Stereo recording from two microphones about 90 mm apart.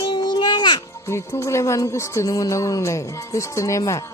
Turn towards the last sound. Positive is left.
turn(degrees=35)  # may be behind; listen again after turning